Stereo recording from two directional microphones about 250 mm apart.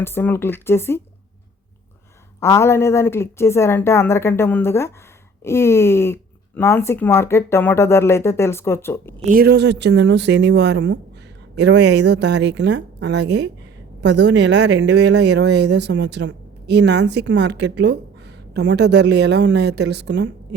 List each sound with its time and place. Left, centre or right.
0.0 s speech: centre
2.4 s speech: centre
9.2 s speech: right